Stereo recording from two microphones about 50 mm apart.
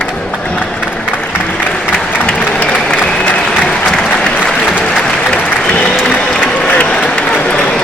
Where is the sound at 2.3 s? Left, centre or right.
Left.